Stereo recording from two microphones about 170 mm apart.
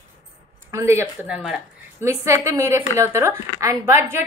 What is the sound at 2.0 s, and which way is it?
A woman's voice, 15° right (ahead or behind).